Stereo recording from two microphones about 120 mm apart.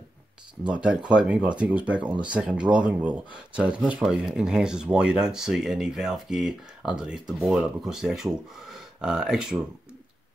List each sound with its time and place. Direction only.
0.7 s speech: 10° right (ahead or behind)